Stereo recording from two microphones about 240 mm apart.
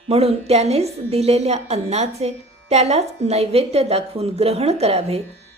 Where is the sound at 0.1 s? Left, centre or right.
Right.